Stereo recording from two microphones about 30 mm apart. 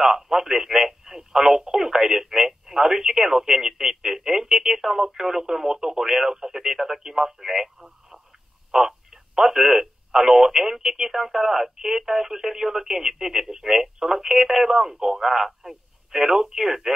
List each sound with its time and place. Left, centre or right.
0.0 s speech: centre
6.3 s radio: centre
8.7 s telephone: centre
14.7 s speech: centre
15.0 s telephone: centre